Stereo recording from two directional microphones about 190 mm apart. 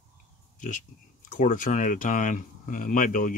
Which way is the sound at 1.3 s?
45° left (ahead or behind).